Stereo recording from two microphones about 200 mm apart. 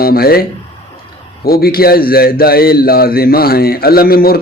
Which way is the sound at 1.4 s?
50° left (ahead or behind).